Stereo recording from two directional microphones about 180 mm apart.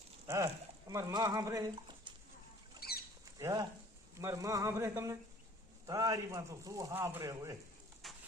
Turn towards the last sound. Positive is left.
turn(degrees=-20)  # may be behind; listen again after turning